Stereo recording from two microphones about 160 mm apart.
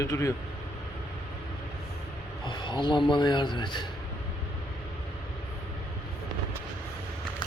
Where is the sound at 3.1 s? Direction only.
30° left (ahead or behind).